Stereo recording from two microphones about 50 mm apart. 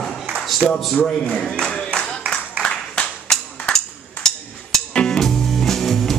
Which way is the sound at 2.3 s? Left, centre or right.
Centre.